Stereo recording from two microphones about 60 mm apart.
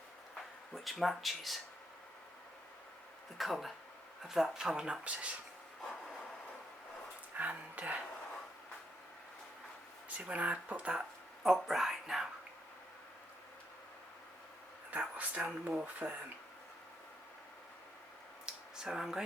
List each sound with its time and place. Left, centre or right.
0.7 s speech: centre
3.3 s speech: centre
7.3 s a sound: right
10.1 s speech: right
11.4 s speech: centre
14.8 s speech: right
18.4 s a sound: centre